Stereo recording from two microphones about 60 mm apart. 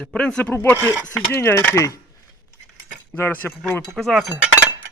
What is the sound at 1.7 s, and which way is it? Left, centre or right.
Speech, left.